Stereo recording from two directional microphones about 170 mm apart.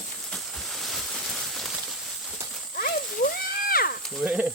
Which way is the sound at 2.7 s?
55° left (ahead or behind).